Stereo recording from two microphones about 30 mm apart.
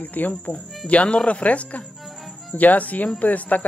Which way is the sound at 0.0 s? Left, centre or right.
Left.